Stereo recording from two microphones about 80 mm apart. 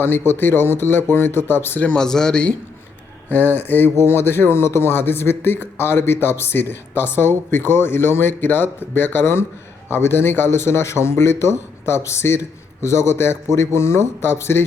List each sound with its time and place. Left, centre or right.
0.0 s speech: left
1.9 s speech: centre
3.3 s speech: left